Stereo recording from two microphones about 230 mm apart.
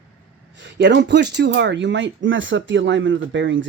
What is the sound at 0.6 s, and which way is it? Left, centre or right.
Speech, right.